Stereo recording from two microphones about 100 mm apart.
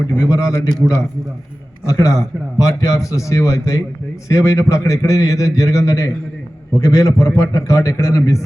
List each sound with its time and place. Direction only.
0.2 s a man's voice: 35° left (ahead or behind)